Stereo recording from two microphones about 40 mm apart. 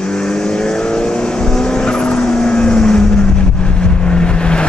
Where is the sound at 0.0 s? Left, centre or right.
Left.